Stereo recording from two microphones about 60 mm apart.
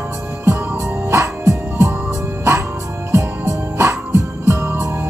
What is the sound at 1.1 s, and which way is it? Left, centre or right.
Music, right.